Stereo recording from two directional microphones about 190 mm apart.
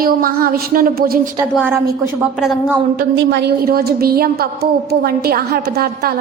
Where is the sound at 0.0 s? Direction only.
50° right (ahead or behind).